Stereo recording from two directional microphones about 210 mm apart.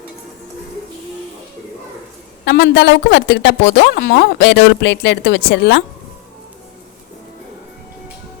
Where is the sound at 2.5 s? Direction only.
55° left (ahead or behind).